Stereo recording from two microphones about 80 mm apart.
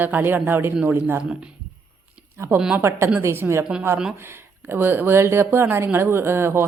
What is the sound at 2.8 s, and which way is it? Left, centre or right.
Speech, right.